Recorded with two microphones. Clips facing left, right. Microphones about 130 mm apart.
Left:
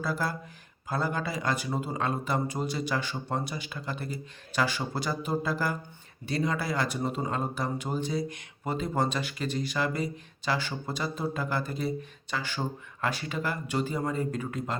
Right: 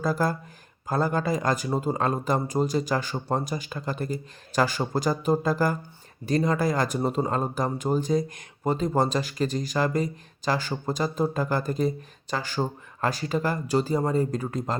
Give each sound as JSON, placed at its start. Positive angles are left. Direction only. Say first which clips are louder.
{"t": 0.0, "sound": "speech", "louder": "right 6 dB", "side_deg": -45}